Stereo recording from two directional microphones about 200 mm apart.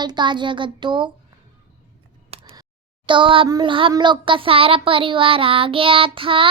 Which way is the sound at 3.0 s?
25° right (ahead or behind).